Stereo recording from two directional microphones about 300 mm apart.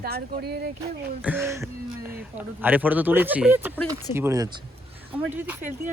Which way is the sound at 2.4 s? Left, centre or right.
Centre.